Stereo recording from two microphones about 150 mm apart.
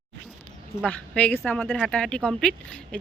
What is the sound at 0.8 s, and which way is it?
Speech, 10° left (ahead or behind).